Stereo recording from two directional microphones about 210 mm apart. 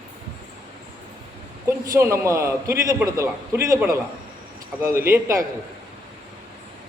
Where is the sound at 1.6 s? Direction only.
15° right (ahead or behind).